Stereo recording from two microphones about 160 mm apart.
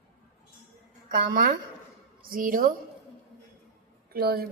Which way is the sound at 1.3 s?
70° right (ahead or behind).